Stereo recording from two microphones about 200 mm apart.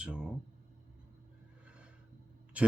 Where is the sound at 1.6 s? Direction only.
5° right (ahead or behind).